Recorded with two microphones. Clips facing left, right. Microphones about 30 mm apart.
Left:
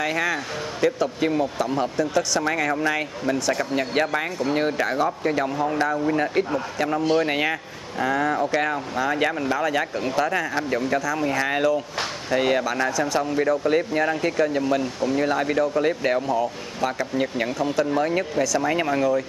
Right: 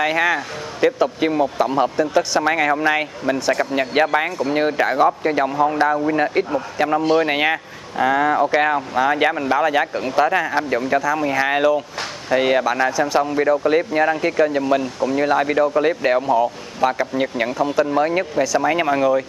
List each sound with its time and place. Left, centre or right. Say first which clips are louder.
0.0 s speech: right 6 dB; right; by 15.1 s centre
15.1 s speech: right 5 dB; centre